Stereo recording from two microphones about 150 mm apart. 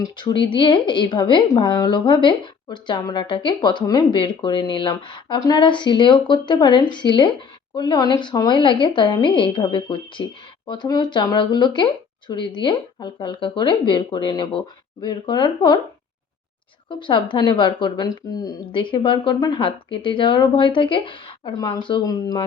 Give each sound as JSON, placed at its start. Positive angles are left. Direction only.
{"t": 0.0, "sound": "speech", "side_deg": 30}
{"t": 16.9, "sound": "speech", "side_deg": 35}